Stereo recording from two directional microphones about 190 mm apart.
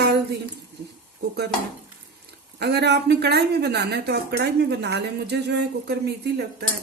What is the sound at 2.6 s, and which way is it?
A woman's voice, 60° right (ahead or behind).